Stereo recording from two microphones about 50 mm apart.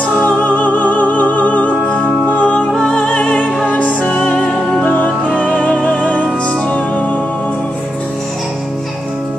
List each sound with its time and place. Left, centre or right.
0.2 s music: left
2.7 s music: centre
4.8 s music: left